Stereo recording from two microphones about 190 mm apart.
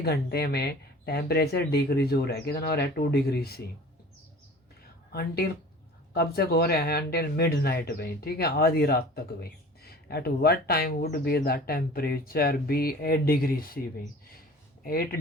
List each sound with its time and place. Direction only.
0.0 s speech: 55° left (ahead or behind)
5.1 s speech: 55° left (ahead or behind)
14.8 s speech: 50° left (ahead or behind)